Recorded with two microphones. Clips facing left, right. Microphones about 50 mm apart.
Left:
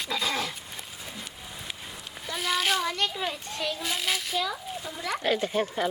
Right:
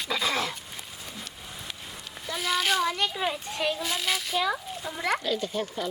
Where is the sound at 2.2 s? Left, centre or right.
Centre.